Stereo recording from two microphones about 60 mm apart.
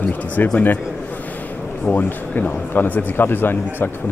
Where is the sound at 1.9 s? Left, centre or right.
Left.